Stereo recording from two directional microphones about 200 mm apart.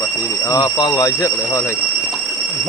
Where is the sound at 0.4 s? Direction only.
20° left (ahead or behind).